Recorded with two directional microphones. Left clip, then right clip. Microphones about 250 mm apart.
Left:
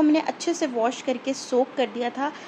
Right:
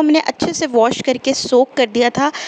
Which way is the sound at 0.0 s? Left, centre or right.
Right.